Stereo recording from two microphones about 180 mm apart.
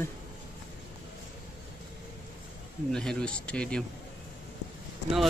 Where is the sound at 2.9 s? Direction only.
5° left (ahead or behind).